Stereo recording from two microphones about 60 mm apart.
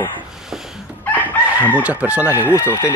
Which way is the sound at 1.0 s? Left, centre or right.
Left.